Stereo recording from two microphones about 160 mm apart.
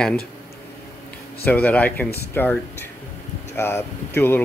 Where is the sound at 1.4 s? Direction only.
10° left (ahead or behind).